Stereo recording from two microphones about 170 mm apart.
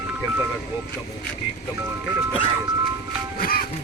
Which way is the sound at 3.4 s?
60° left (ahead or behind).